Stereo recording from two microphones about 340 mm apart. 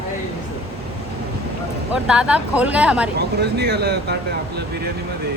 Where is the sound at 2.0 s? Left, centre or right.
Centre.